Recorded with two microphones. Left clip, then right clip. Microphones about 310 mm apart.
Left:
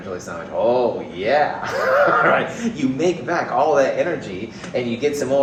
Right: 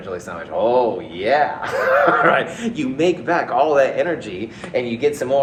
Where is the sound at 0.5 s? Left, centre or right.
Right.